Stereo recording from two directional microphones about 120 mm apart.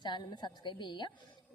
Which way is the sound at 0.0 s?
35° left (ahead or behind).